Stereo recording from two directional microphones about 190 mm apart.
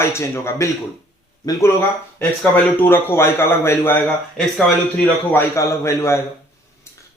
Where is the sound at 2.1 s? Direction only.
10° left (ahead or behind).